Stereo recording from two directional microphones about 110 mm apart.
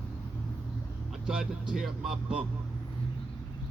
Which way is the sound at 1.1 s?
5° right (ahead or behind).